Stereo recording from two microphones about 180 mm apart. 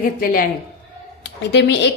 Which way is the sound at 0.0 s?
55° left (ahead or behind).